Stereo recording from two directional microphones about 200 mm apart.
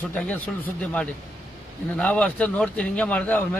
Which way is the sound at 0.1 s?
10° left (ahead or behind).